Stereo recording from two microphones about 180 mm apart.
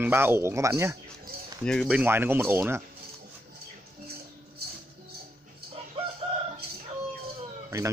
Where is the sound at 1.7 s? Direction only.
Centre (ahead or behind).